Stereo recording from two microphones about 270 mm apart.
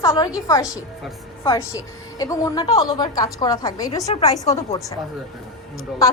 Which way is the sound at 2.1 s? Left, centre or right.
Centre.